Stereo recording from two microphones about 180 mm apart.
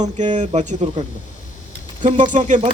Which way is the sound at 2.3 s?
45° right (ahead or behind).